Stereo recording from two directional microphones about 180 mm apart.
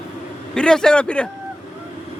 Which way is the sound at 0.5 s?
5° left (ahead or behind).